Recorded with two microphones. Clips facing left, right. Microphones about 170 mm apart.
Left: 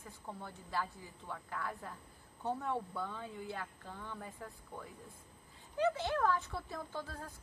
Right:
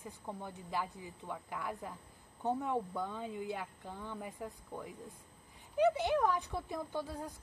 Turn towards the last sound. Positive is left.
turn(degrees=-15)  # may be behind; listen again after turning